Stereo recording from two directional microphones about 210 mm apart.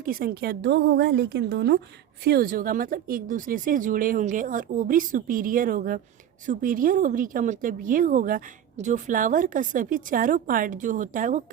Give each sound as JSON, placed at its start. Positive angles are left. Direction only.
{"t": 0.0, "sound": "a woman's voice", "side_deg": -45}